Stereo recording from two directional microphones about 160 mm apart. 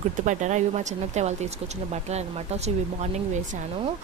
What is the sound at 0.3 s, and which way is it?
Speech, 50° right (ahead or behind).